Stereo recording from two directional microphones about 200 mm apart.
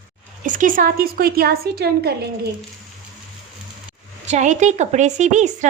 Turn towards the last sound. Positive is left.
turn(degrees=-35)  # may be behind; listen again after turning